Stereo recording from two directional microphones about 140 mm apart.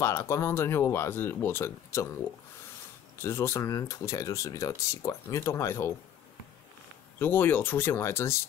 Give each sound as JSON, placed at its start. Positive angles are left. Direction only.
{"t": 0.0, "sound": "speech", "side_deg": 20}
{"t": 3.2, "sound": "speech", "side_deg": 20}
{"t": 7.2, "sound": "speech", "side_deg": 15}